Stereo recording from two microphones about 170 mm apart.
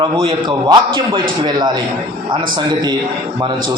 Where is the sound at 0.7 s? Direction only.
25° right (ahead or behind).